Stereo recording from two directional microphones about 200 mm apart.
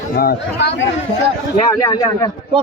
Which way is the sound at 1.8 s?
15° left (ahead or behind).